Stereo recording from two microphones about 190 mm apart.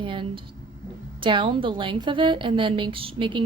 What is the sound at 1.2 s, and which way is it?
A woman's voice, 25° right (ahead or behind).